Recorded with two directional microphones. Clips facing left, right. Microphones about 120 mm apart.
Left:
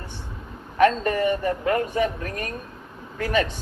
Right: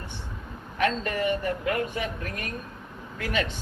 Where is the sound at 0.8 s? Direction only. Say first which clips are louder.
Left 7 dB; 35° left (ahead or behind).